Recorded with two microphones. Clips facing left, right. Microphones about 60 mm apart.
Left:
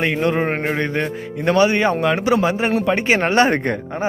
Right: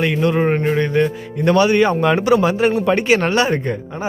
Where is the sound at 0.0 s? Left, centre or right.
Left.